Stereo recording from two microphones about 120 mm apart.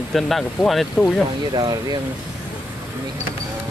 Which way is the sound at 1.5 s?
35° right (ahead or behind).